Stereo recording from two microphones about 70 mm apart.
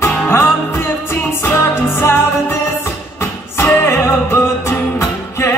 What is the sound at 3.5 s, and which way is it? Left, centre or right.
Music, left.